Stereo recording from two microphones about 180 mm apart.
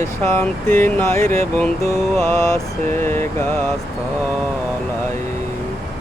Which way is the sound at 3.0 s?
15° left (ahead or behind).